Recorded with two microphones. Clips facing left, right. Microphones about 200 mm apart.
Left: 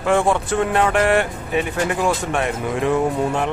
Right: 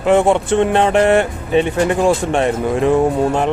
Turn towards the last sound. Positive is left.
turn(degrees=-35)  # may be behind; listen again after turning